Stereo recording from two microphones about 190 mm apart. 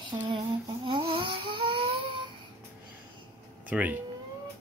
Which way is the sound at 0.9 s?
25° right (ahead or behind).